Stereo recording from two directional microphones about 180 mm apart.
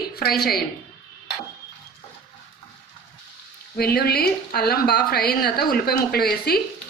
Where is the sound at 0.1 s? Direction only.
60° left (ahead or behind).